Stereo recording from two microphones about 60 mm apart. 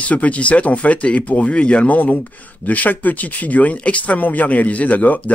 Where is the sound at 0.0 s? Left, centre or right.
Left.